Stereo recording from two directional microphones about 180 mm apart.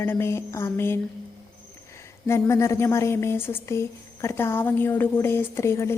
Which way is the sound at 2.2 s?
15° left (ahead or behind).